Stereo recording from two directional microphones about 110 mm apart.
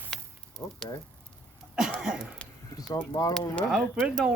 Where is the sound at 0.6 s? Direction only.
25° left (ahead or behind).